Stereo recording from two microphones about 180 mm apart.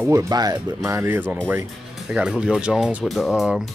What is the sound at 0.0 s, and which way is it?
Speech, 15° right (ahead or behind).